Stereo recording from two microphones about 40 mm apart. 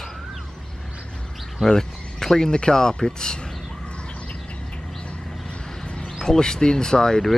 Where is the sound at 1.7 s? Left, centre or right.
Centre.